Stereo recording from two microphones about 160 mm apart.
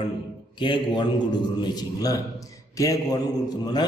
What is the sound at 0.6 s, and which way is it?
A man's voice, 30° left (ahead or behind).